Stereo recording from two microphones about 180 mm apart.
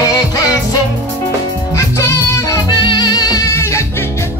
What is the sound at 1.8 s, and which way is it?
Music, 15° left (ahead or behind).